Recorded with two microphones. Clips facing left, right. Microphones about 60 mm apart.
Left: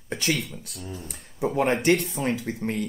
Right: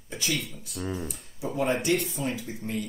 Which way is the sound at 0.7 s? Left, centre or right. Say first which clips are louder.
Right 7 dB; right.